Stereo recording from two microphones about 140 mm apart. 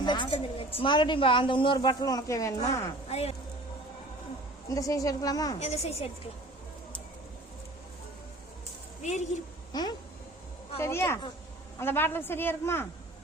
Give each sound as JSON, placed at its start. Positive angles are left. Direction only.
{"t": 0.0, "sound": "a woman's voice", "side_deg": 35}
{"t": 3.1, "sound": "a woman's voice", "side_deg": 50}
{"t": 4.7, "sound": "a woman's voice", "side_deg": 25}
{"t": 5.5, "sound": "a woman's voice", "side_deg": 50}
{"t": 9.0, "sound": "a woman's voice", "side_deg": 55}
{"t": 9.7, "sound": "a woman's voice", "side_deg": 30}
{"t": 10.8, "sound": "a woman's voice", "side_deg": 15}